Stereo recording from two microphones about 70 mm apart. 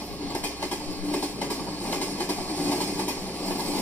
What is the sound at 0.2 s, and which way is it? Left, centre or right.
Train, left.